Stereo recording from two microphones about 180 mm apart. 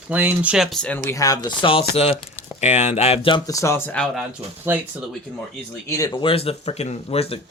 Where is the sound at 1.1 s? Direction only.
20° left (ahead or behind).